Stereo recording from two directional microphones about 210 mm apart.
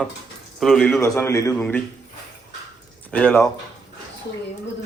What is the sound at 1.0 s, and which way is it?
Speech, 15° left (ahead or behind).